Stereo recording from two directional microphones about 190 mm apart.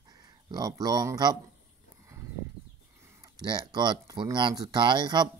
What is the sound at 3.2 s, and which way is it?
Speech, 20° right (ahead or behind).